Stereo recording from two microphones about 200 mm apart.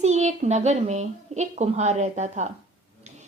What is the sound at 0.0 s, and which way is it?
Speech, 35° right (ahead or behind).